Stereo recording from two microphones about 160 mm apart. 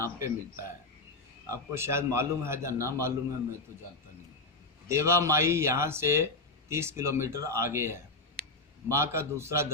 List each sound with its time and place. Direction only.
0.0 s speech: 20° right (ahead or behind)
4.9 s speech: 15° right (ahead or behind)